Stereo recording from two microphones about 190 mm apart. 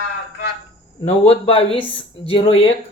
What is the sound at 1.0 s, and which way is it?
Speech, 30° left (ahead or behind).